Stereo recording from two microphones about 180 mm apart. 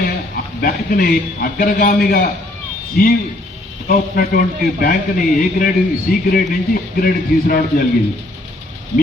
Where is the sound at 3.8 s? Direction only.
50° left (ahead or behind).